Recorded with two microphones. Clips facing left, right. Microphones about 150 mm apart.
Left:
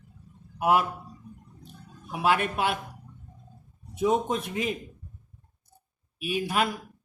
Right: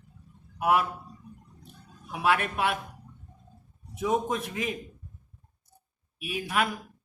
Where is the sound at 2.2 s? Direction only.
30° left (ahead or behind).